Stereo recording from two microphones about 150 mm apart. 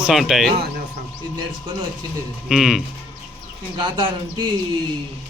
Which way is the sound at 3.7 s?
35° right (ahead or behind).